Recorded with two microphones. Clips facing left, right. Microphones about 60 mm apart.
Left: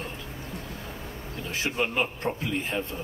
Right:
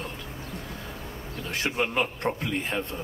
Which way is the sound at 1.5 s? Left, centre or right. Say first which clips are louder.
Right 1 dB; right.